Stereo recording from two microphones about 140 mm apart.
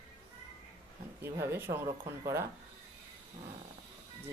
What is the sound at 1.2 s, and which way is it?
Speech, 15° right (ahead or behind).